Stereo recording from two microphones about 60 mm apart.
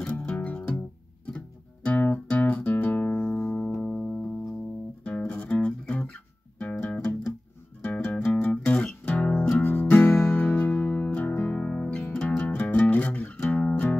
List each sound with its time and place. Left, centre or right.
0.0 s music: left
1.9 s music: left
3.3 s music: centre
5.3 s music: left